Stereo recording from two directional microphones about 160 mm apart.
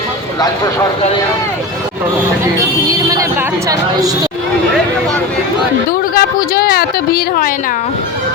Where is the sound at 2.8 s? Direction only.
20° right (ahead or behind).